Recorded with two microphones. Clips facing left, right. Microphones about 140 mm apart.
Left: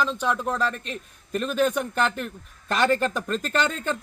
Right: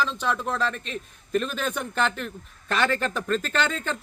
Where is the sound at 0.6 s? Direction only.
40° left (ahead or behind).